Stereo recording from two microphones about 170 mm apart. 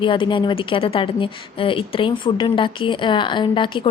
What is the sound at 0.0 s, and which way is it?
A woman's voice, 30° left (ahead or behind).